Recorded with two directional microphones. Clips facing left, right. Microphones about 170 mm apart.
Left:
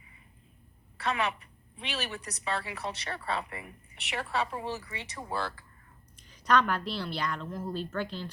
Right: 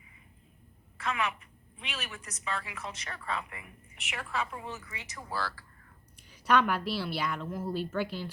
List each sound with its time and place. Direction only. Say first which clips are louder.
0.9 s a woman's voice: left 2 dB; 35° left (ahead or behind)
6.1 s a woman's voice: even; 10° right (ahead or behind)